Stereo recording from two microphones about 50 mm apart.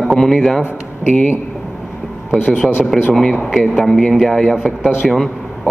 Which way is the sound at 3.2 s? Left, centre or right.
Centre.